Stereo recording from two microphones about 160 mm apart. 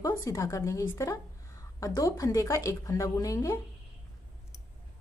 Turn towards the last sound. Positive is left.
turn(degrees=20)  # may be behind; listen again after turning